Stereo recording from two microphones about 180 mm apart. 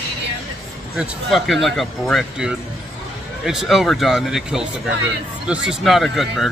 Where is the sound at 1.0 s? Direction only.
Centre (ahead or behind).